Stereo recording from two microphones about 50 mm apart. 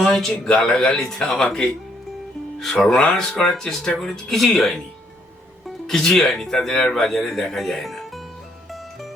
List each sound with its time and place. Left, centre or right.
0.0 s speech: centre
3.0 s speech: centre
3.4 s speech: centre
6.0 s speech: centre